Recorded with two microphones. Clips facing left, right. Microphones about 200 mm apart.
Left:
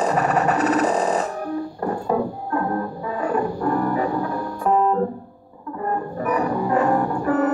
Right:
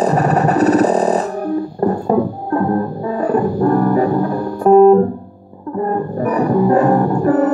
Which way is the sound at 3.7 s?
40° right (ahead or behind).